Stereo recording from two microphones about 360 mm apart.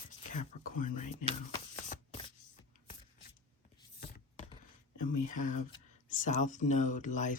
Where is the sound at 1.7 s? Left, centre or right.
Centre.